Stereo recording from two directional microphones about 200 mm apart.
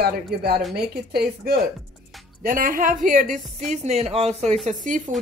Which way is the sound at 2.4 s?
45° right (ahead or behind).